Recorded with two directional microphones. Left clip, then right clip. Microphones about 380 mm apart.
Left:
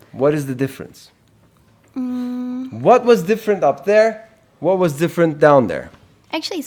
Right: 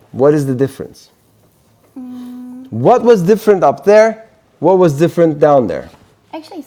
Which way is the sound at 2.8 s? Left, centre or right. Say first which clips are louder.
Right 3 dB; centre.